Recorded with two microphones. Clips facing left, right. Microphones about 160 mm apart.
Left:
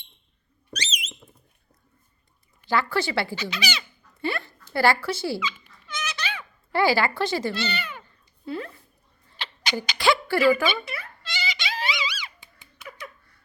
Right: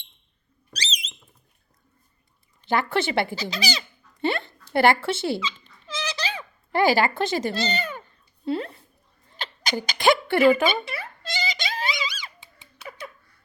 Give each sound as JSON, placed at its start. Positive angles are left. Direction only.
{"t": 0.7, "sound": "alarm", "side_deg": -35}
{"t": 2.6, "sound": "speech", "side_deg": -20}
{"t": 3.3, "sound": "speech", "side_deg": -35}
{"t": 4.2, "sound": "speech", "side_deg": -25}
{"t": 5.9, "sound": "goat", "side_deg": -30}
{"t": 6.7, "sound": "speech", "side_deg": -20}
{"t": 7.5, "sound": "speech", "side_deg": -40}
{"t": 8.4, "sound": "speech", "side_deg": -25}
{"t": 10.0, "sound": "speech", "side_deg": -20}
{"t": 11.2, "sound": "a sound", "side_deg": -45}